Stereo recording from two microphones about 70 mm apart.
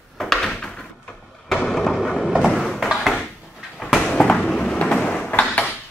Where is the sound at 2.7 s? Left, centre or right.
Centre.